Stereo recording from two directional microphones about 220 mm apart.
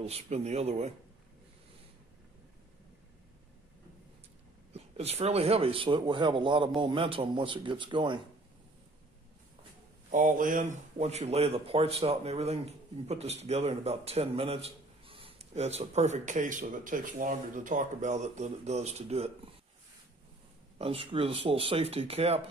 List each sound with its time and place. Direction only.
0.0 s speech: 30° right (ahead or behind)
4.7 s speech: 30° right (ahead or behind)
10.1 s speech: 35° right (ahead or behind)
20.7 s speech: 25° right (ahead or behind)